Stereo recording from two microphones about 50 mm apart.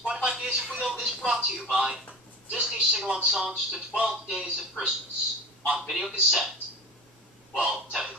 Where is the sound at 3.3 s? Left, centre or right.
Centre.